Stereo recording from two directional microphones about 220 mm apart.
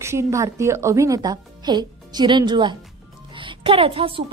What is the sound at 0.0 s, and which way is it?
A woman's voice, 15° right (ahead or behind).